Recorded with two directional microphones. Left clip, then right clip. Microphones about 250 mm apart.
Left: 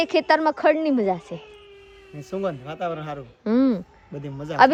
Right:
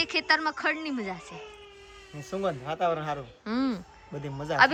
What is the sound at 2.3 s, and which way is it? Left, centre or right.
Speech, centre.